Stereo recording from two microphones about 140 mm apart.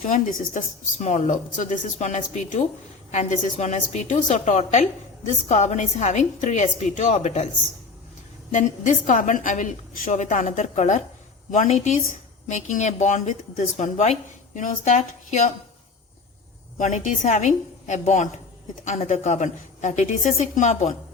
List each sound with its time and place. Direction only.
0.0 s a woman's voice: 55° left (ahead or behind)
8.5 s a woman's voice: 65° left (ahead or behind)
16.7 s a woman's voice: 60° left (ahead or behind)